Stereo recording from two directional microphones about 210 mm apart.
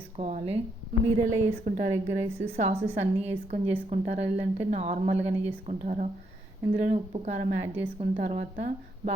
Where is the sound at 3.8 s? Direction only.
35° right (ahead or behind).